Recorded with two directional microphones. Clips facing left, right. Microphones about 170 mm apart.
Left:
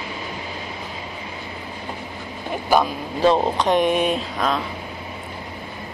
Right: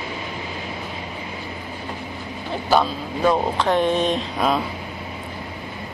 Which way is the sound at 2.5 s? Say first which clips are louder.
Even; 15° left (ahead or behind).